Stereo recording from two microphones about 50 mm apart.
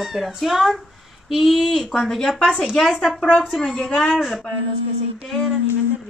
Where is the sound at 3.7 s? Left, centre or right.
Centre.